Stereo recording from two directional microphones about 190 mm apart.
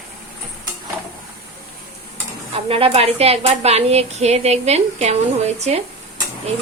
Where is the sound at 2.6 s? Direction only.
30° right (ahead or behind).